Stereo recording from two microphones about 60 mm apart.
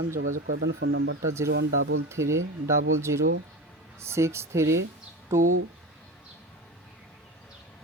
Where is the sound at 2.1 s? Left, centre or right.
Right.